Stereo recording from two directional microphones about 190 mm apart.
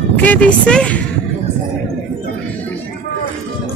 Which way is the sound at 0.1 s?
10° left (ahead or behind).